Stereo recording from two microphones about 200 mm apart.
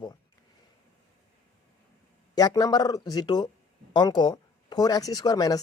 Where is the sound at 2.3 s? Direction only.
20° left (ahead or behind).